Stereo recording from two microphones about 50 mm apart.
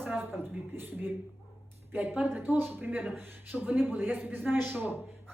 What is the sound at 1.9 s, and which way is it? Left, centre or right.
A woman's voice, right.